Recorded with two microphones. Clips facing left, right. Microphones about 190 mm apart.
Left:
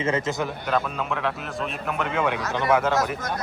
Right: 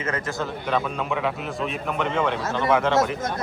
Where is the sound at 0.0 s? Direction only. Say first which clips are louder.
Left 3 dB; 25° left (ahead or behind).